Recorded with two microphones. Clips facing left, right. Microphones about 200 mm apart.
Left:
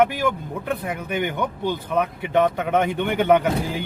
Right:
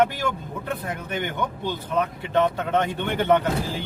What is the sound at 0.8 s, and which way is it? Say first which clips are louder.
Speech: left 4 dB; 10° left (ahead or behind).